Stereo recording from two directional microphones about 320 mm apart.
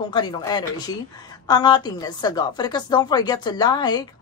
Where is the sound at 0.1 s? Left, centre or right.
Centre.